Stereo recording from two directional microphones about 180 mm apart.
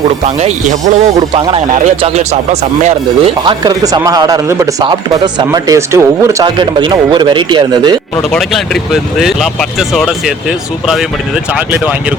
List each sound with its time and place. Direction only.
0.3 s speech: 40° right (ahead or behind)
1.3 s speech: 30° right (ahead or behind)
3.4 s speech: 25° right (ahead or behind)
8.1 s speech: centre (ahead or behind)
11.5 s speech: 10° right (ahead or behind)